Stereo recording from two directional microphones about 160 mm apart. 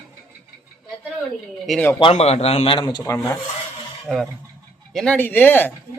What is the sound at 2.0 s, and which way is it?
Speech, 40° left (ahead or behind).